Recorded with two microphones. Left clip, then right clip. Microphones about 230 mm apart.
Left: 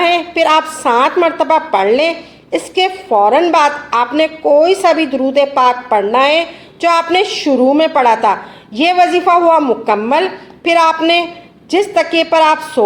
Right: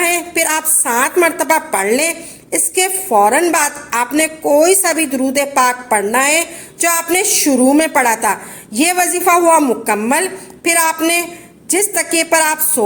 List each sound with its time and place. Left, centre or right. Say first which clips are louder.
0.0 s a woman's voice: left 4 dB; right